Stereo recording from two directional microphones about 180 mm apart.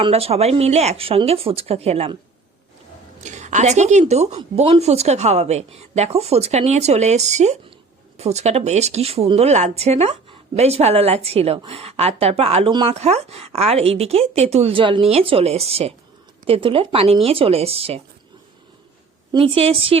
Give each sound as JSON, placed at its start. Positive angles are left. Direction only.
{"t": 0.0, "sound": "speech", "side_deg": -35}
{"t": 3.2, "sound": "a woman's voice", "side_deg": -40}
{"t": 19.3, "sound": "speech", "side_deg": -30}